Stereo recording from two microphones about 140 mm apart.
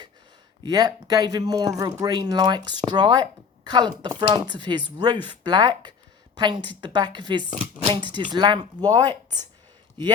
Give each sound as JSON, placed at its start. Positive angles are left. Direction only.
{"t": 0.6, "sound": "speech", "side_deg": -30}